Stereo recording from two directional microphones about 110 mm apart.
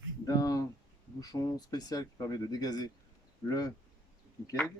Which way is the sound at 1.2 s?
35° left (ahead or behind).